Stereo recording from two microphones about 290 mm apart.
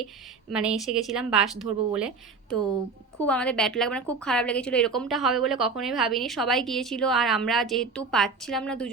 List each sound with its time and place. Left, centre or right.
0.5 s a woman's voice: centre